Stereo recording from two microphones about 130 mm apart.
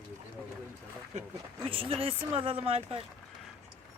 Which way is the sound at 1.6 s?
45° right (ahead or behind).